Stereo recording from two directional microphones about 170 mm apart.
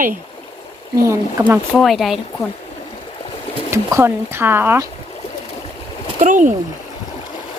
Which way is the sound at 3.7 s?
15° right (ahead or behind).